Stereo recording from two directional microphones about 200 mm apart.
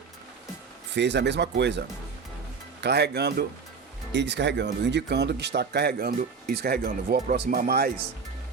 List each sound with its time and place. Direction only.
0.9 s speech: 60° right (ahead or behind)
2.8 s speech: 55° right (ahead or behind)